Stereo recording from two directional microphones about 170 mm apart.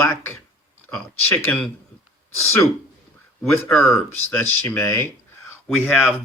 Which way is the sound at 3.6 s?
15° left (ahead or behind).